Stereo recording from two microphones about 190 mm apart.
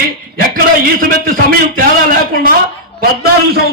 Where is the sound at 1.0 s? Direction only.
45° right (ahead or behind).